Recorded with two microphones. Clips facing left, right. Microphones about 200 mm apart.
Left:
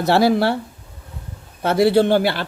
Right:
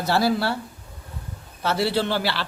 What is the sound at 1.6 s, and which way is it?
Speech, 50° left (ahead or behind).